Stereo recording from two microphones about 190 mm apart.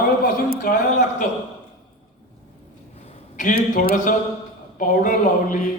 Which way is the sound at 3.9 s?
45° left (ahead or behind).